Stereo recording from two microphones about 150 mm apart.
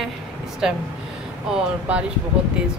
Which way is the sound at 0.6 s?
5° right (ahead or behind).